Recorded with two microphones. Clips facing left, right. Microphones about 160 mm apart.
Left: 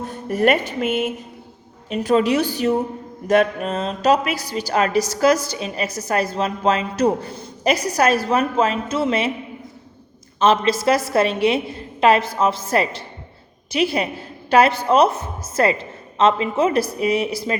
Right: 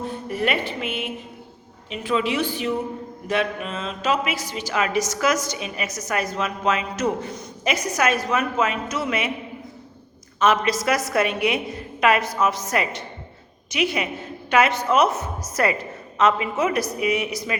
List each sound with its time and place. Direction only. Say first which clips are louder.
0.3 s a woman's voice: left 7 dB; 45° left (ahead or behind); by 9.3 s 30° left (ahead or behind)
10.4 s a woman's voice: left 3 dB; 30° left (ahead or behind)